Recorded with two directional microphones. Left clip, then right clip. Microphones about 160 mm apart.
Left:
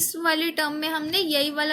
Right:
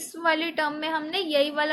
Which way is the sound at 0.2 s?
50° left (ahead or behind).